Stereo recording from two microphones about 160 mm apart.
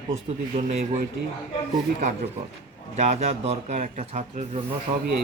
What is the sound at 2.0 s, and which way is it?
Speech, 50° right (ahead or behind).